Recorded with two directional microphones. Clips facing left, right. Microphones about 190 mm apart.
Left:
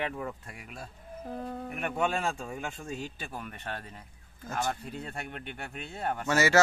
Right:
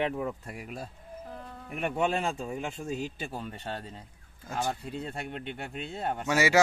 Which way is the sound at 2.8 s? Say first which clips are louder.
Right 4 dB; 20° right (ahead or behind).